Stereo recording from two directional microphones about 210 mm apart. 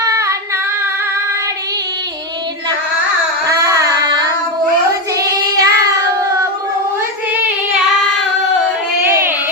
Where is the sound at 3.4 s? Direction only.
15° right (ahead or behind).